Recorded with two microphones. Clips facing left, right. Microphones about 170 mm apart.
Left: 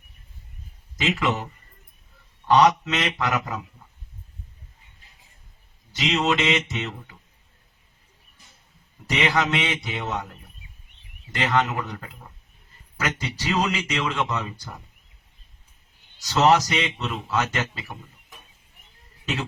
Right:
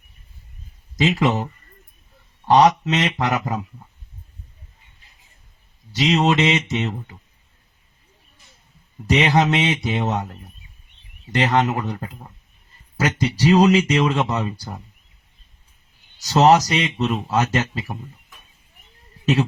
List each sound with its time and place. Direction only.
0.9 s speech: 35° right (ahead or behind)
2.5 s speech: 40° right (ahead or behind)
5.9 s speech: 40° right (ahead or behind)
9.0 s speech: 40° right (ahead or behind)
11.3 s speech: 40° right (ahead or behind)
16.2 s speech: 40° right (ahead or behind)